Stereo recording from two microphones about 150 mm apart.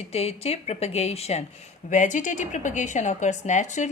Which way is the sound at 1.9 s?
55° left (ahead or behind).